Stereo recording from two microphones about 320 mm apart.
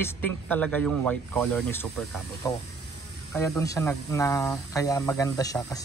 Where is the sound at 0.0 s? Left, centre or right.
Centre.